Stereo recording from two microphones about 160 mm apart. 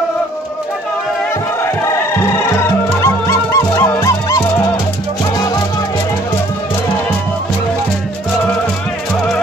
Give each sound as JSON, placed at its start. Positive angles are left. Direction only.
{"t": 1.6, "sound": "music", "side_deg": 15}